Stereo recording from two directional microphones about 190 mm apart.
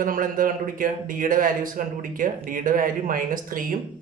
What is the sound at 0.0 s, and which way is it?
A man's voice, 45° right (ahead or behind).